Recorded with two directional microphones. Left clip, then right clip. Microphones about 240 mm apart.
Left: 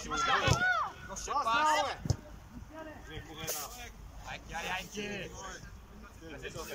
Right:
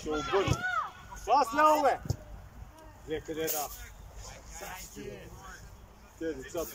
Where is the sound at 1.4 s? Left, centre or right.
Left.